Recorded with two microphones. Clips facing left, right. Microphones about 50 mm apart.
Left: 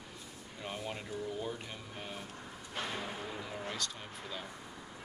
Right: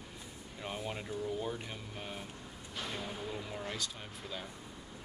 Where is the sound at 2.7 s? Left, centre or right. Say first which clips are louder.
Left 2 dB; left.